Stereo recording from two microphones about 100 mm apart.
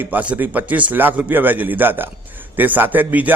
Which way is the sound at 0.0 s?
15° right (ahead or behind).